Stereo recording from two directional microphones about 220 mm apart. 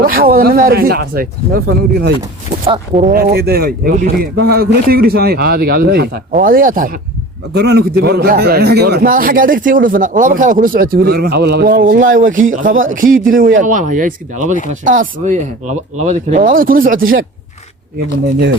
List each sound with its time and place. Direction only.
0.0 s speech: 40° right (ahead or behind)
2.6 s speech: 30° right (ahead or behind)